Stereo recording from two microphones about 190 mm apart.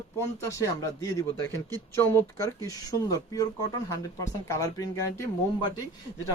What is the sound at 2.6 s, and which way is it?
Speech, 20° left (ahead or behind).